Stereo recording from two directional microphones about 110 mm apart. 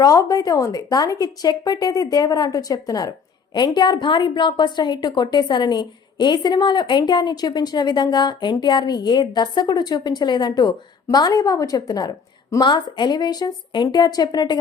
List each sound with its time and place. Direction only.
0.0 s speech: 35° left (ahead or behind)